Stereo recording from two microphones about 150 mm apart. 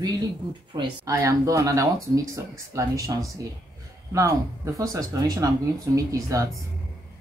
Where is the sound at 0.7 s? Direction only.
25° right (ahead or behind).